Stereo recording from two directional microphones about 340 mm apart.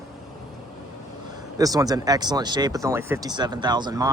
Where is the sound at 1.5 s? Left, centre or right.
Centre.